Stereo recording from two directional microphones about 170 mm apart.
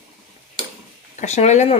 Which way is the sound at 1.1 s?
40° left (ahead or behind).